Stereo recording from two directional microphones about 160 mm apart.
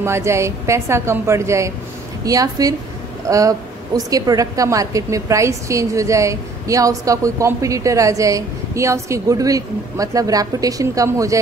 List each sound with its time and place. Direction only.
0.0 s a woman's voice: 15° right (ahead or behind)